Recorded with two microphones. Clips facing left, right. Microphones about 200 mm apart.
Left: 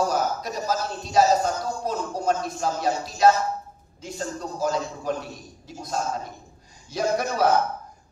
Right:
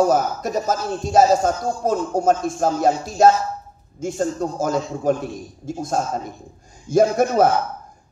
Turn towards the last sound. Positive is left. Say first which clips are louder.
# right 9 dB
turn(degrees=-50)  # may be behind; listen again after turning